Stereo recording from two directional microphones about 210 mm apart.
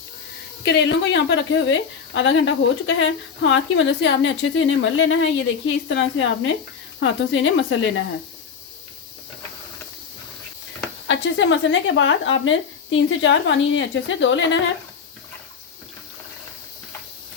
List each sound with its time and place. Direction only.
0.6 s a woman's voice: 55° left (ahead or behind)
11.1 s a woman's voice: 60° left (ahead or behind)